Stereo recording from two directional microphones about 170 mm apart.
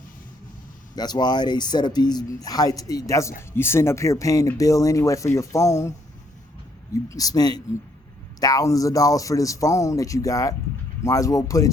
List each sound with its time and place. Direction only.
0.9 s speech: 25° left (ahead or behind)
6.9 s speech: 20° left (ahead or behind)